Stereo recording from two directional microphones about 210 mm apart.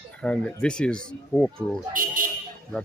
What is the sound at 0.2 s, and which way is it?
Speech, 5° left (ahead or behind).